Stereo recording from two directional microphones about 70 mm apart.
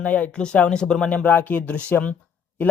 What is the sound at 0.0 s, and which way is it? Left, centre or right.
Speech, centre.